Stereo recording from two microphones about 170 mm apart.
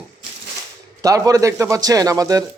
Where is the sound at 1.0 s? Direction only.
20° right (ahead or behind).